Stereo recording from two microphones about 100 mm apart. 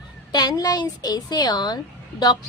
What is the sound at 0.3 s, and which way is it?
A woman's voice, 45° left (ahead or behind).